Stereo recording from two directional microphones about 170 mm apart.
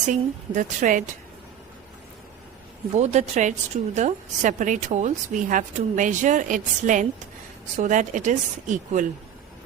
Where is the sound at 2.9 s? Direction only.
45° right (ahead or behind).